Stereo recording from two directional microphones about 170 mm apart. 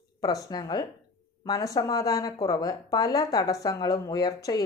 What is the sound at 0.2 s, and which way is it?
Speech, 20° left (ahead or behind).